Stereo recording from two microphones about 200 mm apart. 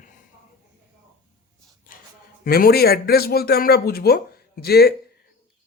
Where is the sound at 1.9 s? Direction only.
45° left (ahead or behind).